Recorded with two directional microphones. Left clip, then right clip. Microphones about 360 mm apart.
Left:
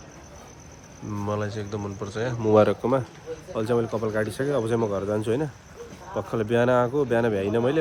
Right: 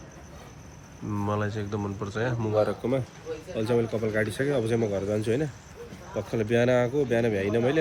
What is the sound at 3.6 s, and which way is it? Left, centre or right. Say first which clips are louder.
Speech: left 2 dB; centre.